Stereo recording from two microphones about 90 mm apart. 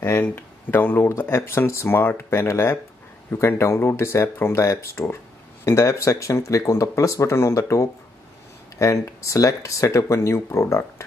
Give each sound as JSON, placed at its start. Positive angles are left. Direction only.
{"t": 0.2, "sound": "speech", "side_deg": 25}